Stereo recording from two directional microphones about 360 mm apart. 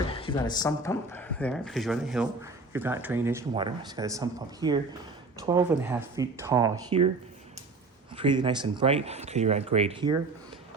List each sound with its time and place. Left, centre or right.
0.0 s speech: centre
8.1 s speech: centre